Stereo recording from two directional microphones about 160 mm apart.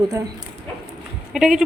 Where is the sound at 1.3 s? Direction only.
5° right (ahead or behind).